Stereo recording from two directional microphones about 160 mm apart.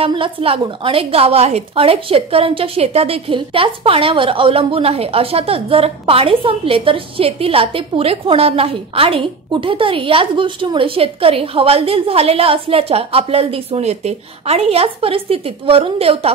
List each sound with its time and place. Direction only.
0.0 s a woman's voice: 35° right (ahead or behind)